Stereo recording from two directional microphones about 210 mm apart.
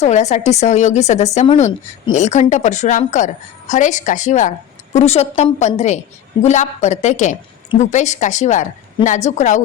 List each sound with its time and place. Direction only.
0.0 s a woman's voice: 35° left (ahead or behind)